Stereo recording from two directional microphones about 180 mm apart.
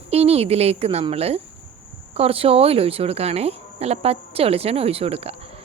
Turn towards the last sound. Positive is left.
turn(degrees=-35)  # may be behind; listen again after turning